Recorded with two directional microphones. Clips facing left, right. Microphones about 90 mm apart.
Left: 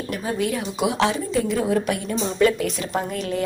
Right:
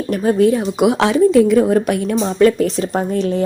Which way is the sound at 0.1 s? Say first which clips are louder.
Right 12 dB; 45° right (ahead or behind).